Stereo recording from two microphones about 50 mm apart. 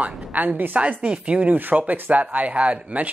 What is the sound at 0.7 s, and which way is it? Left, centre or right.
Speech, right.